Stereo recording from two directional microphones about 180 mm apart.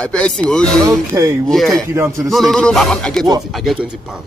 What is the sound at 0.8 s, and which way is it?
Speech, 15° right (ahead or behind).